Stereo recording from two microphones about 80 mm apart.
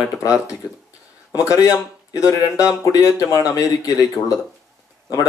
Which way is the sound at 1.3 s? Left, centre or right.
Left.